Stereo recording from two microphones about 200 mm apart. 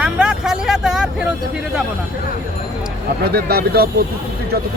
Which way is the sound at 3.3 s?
50° right (ahead or behind).